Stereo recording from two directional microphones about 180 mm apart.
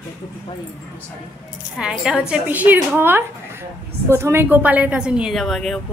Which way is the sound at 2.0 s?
5° right (ahead or behind).